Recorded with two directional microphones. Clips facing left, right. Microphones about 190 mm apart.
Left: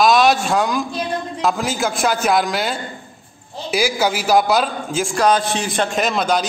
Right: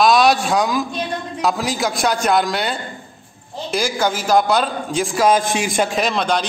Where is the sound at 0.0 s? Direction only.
Centre (ahead or behind).